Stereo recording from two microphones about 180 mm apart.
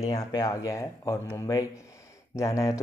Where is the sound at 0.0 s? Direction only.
20° left (ahead or behind).